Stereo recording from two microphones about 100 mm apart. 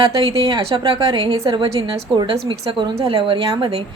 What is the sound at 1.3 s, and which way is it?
Speech, 35° right (ahead or behind).